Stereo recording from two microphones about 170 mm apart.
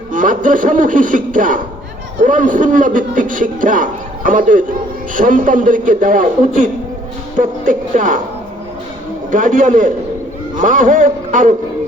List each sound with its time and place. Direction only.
0.1 s speech: 50° right (ahead or behind)
9.3 s speech: 50° right (ahead or behind)